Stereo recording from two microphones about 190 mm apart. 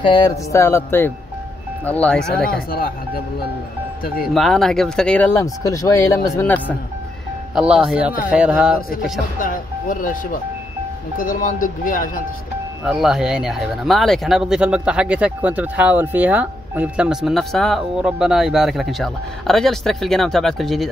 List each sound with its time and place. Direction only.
0.0 s speech: 25° left (ahead or behind)
0.5 s speech: 15° left (ahead or behind)
4.0 s speech: 50° left (ahead or behind)
4.3 s speech: centre (ahead or behind)
7.5 s speech: 5° right (ahead or behind)
9.4 s speech: 45° left (ahead or behind)
12.8 s speech: centre (ahead or behind)